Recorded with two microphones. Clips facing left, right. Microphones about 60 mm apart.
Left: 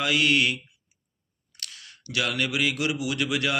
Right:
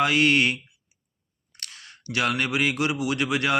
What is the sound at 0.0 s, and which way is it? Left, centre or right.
Speech, right.